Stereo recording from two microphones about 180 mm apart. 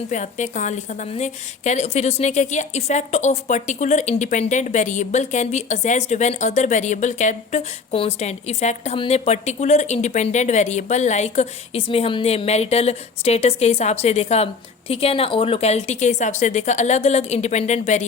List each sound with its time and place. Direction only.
0.1 s a woman's voice: 40° left (ahead or behind)